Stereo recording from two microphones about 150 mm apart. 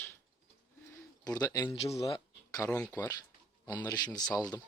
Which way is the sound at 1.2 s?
25° left (ahead or behind).